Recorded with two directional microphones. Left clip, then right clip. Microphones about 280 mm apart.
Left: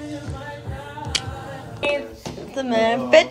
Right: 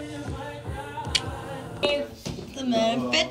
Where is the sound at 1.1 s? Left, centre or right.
Centre.